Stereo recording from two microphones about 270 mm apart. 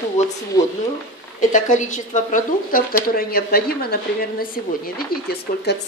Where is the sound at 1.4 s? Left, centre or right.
Left.